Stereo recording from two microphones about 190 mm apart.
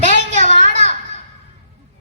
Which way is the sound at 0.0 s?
40° right (ahead or behind).